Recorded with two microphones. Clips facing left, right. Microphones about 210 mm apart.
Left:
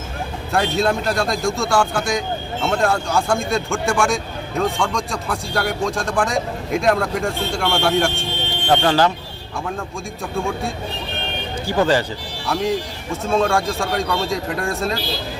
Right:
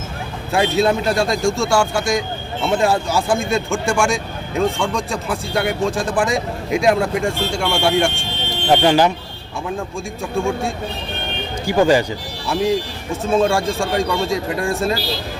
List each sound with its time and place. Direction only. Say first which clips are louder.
0.5 s speech: right 3 dB; centre (ahead or behind)
8.7 s speech: right 2 dB; 15° right (ahead or behind)
11.6 s speech: right 3 dB; 15° right (ahead or behind)
12.5 s speech: right 3 dB; centre (ahead or behind)